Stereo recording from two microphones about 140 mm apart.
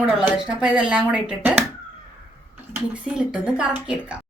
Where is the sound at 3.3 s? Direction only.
10° right (ahead or behind).